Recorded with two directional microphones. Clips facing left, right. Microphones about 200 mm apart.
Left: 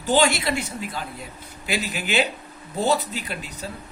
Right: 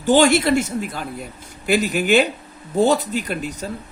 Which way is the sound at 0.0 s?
50° right (ahead or behind).